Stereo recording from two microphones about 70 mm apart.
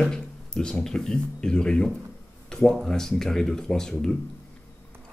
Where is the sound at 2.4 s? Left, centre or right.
Centre.